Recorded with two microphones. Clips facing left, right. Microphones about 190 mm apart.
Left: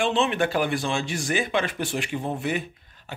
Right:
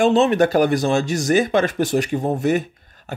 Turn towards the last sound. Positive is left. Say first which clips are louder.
# right 7 dB
turn(degrees=-45)  # may be behind; listen again after turning